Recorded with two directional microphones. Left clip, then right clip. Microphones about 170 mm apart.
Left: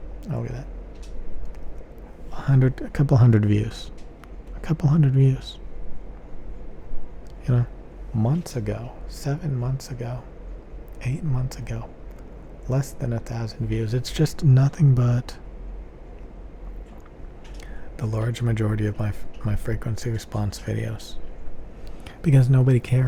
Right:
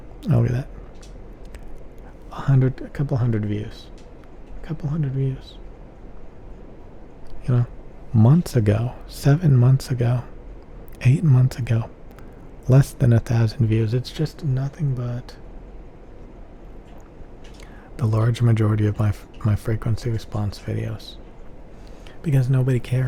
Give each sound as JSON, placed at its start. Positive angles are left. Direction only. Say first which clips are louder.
{"t": 0.2, "sound": "speech", "louder": "right 8 dB", "side_deg": -50}
{"t": 2.6, "sound": "speech", "louder": "left 3 dB", "side_deg": 0}
{"t": 7.4, "sound": "speech", "louder": "right 1 dB", "side_deg": -5}
{"t": 8.1, "sound": "speech", "louder": "right 7 dB", "side_deg": -40}
{"t": 14.0, "sound": "speech", "louder": "left 3 dB", "side_deg": 5}
{"t": 14.3, "sound": "speech", "louder": "left 6 dB", "side_deg": 25}
{"t": 17.9, "sound": "speech", "louder": "right 4 dB", "side_deg": -25}
{"t": 22.2, "sound": "speech", "louder": "left 2 dB", "side_deg": 10}